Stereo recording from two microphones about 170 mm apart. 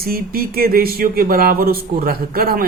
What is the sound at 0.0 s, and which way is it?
Speech, 60° right (ahead or behind).